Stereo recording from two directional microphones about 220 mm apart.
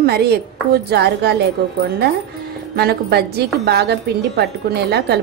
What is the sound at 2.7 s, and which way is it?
A woman's voice, 45° right (ahead or behind).